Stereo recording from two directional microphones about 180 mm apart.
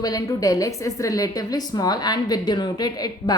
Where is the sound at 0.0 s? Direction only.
20° left (ahead or behind).